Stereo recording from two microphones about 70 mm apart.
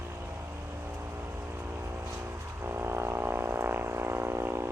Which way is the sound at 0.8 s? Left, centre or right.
Right.